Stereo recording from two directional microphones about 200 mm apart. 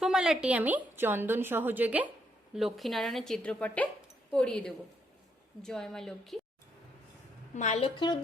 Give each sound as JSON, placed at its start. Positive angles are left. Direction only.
{"t": 0.0, "sound": "a woman's voice", "side_deg": -5}
{"t": 7.5, "sound": "a woman's voice", "side_deg": 35}